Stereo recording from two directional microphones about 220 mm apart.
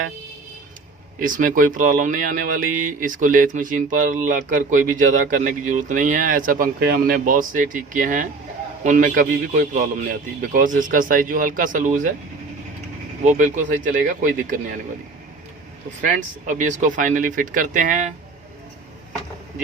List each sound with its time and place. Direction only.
1.2 s speech: 35° right (ahead or behind)
13.3 s speech: 35° right (ahead or behind)
16.5 s speech: 35° right (ahead or behind)